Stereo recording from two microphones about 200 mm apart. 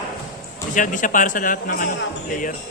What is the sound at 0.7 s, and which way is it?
A man's voice, 40° left (ahead or behind).